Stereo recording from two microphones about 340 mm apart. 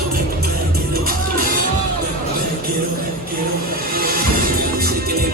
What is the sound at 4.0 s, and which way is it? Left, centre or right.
Music, right.